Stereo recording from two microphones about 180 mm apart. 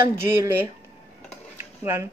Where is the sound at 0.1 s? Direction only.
15° right (ahead or behind).